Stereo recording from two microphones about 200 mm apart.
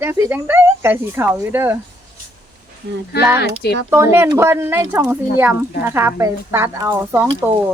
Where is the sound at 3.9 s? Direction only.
10° right (ahead or behind).